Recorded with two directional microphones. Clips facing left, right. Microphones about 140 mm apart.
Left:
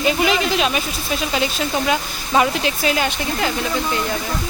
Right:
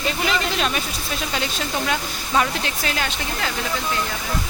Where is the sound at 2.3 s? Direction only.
15° left (ahead or behind).